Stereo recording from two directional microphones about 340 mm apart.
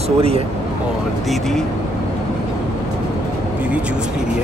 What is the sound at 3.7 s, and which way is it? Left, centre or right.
Speech, centre.